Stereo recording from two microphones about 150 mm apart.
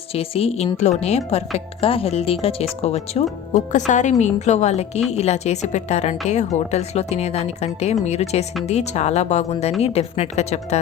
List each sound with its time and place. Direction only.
0.1 s speech: 40° left (ahead or behind)